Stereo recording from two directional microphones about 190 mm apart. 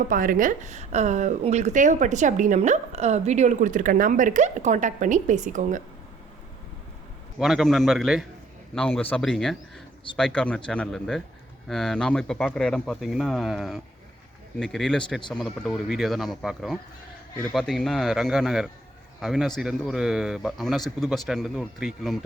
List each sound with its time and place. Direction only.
0.1 s a woman's voice: 45° right (ahead or behind)
7.3 s speech: centre (ahead or behind)